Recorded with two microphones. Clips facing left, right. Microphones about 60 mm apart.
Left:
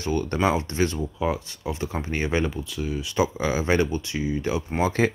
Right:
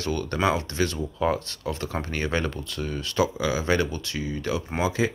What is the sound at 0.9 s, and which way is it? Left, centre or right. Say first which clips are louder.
Speech: right 1 dB; centre.